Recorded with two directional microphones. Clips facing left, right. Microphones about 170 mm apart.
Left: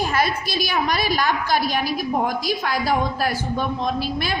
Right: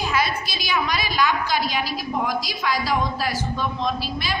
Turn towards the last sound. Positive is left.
turn(degrees=55)  # may be behind; listen again after turning